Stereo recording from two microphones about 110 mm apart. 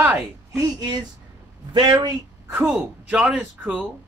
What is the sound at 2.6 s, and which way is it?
A man's voice, 5° right (ahead or behind).